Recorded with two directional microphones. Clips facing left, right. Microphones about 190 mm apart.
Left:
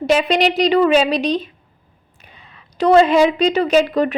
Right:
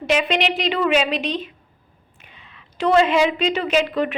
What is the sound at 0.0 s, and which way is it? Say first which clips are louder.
A woman's voice: left 5 dB; 35° left (ahead or behind).